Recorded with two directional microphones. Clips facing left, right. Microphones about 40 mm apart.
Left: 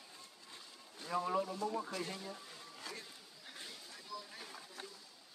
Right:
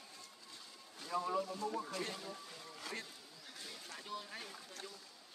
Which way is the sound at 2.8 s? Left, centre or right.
Right.